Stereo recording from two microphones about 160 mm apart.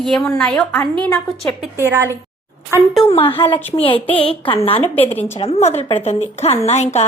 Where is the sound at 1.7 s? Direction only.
15° right (ahead or behind).